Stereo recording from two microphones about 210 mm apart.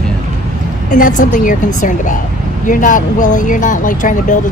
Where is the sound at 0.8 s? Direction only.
40° left (ahead or behind).